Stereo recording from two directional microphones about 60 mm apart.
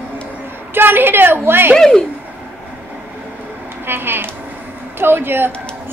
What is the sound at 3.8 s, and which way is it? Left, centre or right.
A woman's voice, right.